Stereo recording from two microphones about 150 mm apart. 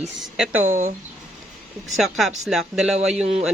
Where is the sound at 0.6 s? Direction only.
50° right (ahead or behind).